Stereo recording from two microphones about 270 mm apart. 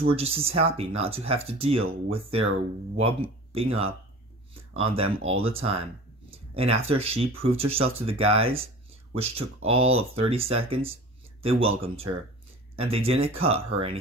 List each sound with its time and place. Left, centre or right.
0.0 s speech: right
5.1 s speech: right